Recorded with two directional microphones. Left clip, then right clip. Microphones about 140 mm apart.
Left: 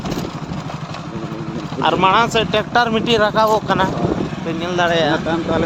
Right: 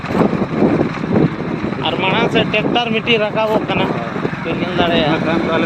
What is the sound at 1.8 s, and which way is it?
Speech, 35° left (ahead or behind).